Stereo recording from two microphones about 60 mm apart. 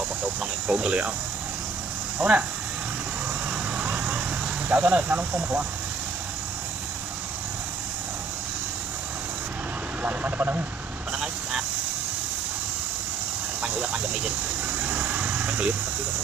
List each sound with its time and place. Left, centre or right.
0.4 s speech: right
2.1 s speech: right
3.4 s vehicle: right
4.6 s speech: right
10.0 s speech: right
13.6 s vehicle: right